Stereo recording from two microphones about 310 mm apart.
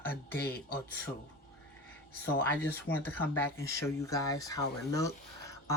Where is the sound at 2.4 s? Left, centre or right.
Centre.